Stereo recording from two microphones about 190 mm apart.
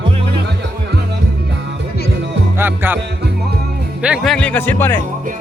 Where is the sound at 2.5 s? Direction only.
10° right (ahead or behind).